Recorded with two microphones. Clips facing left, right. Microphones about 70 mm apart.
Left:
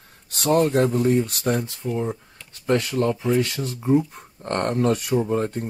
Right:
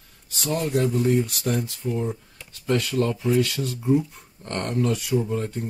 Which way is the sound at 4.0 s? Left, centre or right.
Left.